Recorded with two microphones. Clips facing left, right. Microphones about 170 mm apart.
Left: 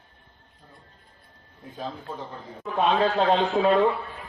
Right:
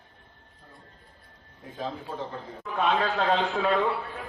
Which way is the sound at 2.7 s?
25° left (ahead or behind).